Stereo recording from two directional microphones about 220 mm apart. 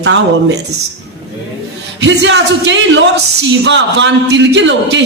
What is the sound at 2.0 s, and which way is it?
A man's voice, 55° right (ahead or behind).